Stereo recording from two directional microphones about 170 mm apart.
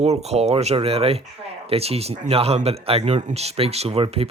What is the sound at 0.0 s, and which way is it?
Speech, 40° right (ahead or behind).